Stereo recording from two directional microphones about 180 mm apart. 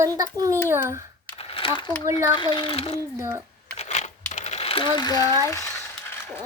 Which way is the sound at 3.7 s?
35° left (ahead or behind).